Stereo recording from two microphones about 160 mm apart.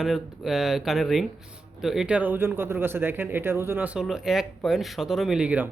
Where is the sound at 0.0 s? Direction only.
Centre (ahead or behind).